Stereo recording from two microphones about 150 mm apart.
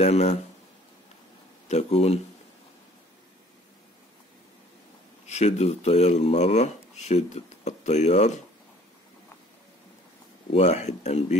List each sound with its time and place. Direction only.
0.0 s speech: 45° left (ahead or behind)
1.7 s speech: 45° left (ahead or behind)
5.2 s speech: 45° left (ahead or behind)
10.5 s speech: 45° left (ahead or behind)